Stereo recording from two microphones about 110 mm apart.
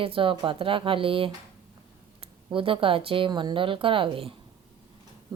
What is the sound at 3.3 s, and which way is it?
Speech, 45° right (ahead or behind).